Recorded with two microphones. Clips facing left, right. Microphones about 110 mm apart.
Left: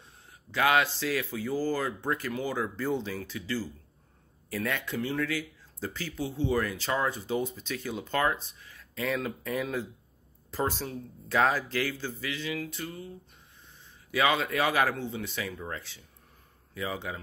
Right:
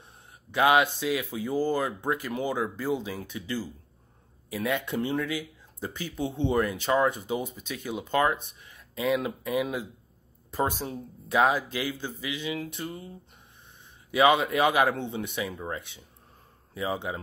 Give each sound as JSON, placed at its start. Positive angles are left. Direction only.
{"t": 0.5, "sound": "speech", "side_deg": -20}
{"t": 14.1, "sound": "speech", "side_deg": -20}